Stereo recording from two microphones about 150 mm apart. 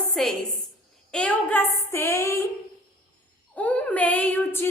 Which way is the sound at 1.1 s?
10° left (ahead or behind).